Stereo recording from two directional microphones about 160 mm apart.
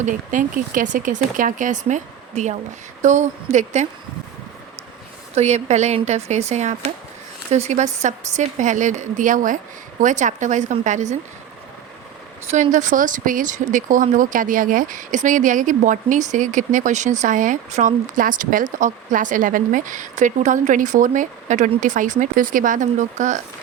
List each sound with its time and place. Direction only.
0.0 s speech: 55° right (ahead or behind)
5.3 s speech: 45° right (ahead or behind)
12.5 s speech: 50° right (ahead or behind)